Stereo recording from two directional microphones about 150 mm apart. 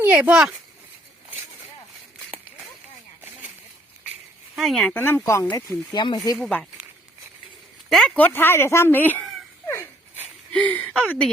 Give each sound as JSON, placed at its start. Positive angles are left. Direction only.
{"t": 0.0, "sound": "speech", "side_deg": -10}
{"t": 4.5, "sound": "speech", "side_deg": 0}
{"t": 6.3, "sound": "speech", "side_deg": 5}
{"t": 7.9, "sound": "speech", "side_deg": 0}
{"t": 9.6, "sound": "dog", "side_deg": 20}
{"t": 10.5, "sound": "speech", "side_deg": 10}